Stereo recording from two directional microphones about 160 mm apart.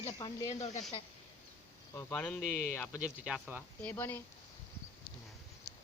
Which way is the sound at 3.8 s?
15° left (ahead or behind).